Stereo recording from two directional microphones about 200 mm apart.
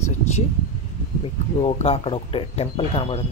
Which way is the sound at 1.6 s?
30° left (ahead or behind).